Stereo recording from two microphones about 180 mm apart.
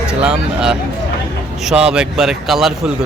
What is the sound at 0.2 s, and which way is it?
Speech, 5° right (ahead or behind).